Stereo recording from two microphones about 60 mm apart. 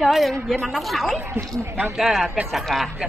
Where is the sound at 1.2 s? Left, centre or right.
Right.